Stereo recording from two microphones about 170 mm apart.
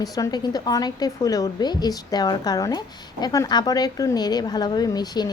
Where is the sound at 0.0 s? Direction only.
25° left (ahead or behind).